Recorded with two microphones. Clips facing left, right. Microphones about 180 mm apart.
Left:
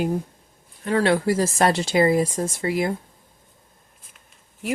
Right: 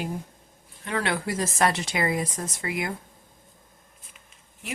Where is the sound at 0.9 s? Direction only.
30° left (ahead or behind).